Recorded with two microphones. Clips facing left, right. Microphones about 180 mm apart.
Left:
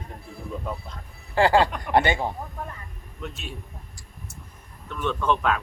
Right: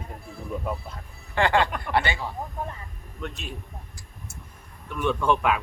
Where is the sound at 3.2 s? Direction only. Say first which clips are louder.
Right 1 dB; centre (ahead or behind).